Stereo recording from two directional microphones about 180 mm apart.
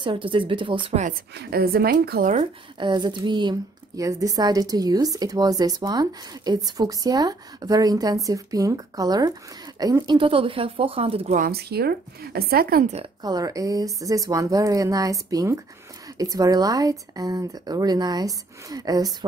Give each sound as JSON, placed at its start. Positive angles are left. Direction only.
{"t": 0.0, "sound": "a woman's voice", "side_deg": -30}
{"t": 1.3, "sound": "speech", "side_deg": -60}
{"t": 2.8, "sound": "a woman's voice", "side_deg": -25}
{"t": 11.3, "sound": "speech", "side_deg": -55}
{"t": 13.2, "sound": "a woman's voice", "side_deg": -20}